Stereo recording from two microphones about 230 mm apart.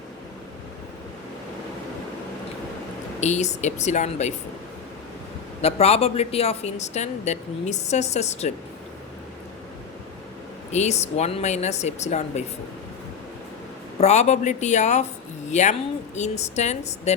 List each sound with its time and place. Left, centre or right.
3.2 s a woman's voice: left
5.6 s a woman's voice: left
10.7 s a woman's voice: left
14.0 s a woman's voice: left